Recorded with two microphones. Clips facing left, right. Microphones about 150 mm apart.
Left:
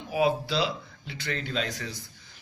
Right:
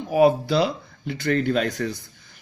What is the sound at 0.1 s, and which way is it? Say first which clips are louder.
Speech: right 8 dB; 50° right (ahead or behind).